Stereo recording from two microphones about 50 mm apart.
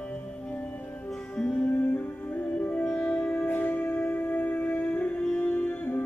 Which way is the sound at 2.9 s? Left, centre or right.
Centre.